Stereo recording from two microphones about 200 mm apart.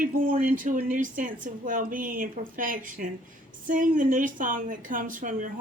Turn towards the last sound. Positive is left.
turn(degrees=-40)  # may be behind; listen again after turning